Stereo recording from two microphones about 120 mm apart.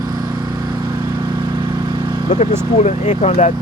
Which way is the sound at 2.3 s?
80° left.